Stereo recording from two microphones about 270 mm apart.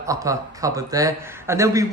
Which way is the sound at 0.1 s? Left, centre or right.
Centre.